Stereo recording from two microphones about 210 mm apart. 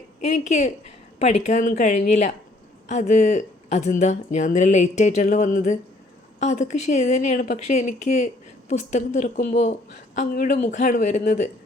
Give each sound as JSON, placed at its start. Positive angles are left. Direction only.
{"t": 0.3, "sound": "speech", "side_deg": 35}